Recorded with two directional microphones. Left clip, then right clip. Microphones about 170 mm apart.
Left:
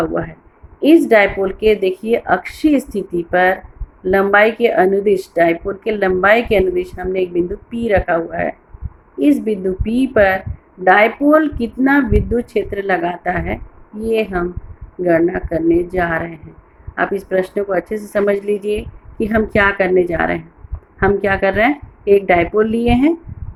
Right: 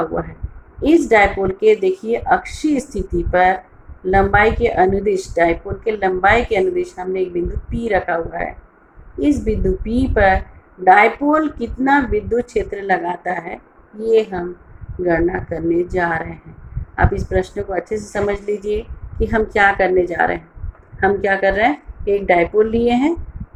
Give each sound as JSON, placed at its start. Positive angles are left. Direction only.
{"t": 0.8, "sound": "speech", "side_deg": 50}